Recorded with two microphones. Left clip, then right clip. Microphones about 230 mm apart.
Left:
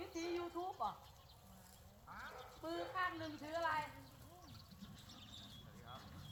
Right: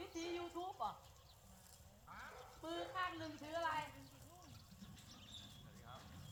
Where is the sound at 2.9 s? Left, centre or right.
Centre.